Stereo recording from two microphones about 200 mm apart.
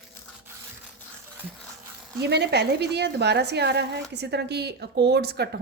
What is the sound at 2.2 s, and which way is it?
A woman's voice, 55° right (ahead or behind).